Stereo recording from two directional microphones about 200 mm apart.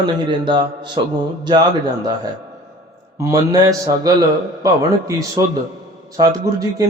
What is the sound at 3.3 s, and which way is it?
Speech, 15° right (ahead or behind).